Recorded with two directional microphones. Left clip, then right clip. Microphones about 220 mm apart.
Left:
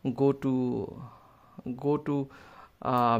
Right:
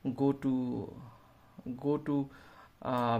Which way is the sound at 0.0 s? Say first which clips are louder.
Left 5 dB; 35° left (ahead or behind).